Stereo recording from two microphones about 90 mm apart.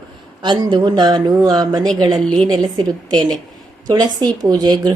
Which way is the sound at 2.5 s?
55° right (ahead or behind).